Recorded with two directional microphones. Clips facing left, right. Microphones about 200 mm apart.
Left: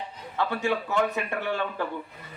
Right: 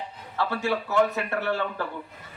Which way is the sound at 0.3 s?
15° left (ahead or behind).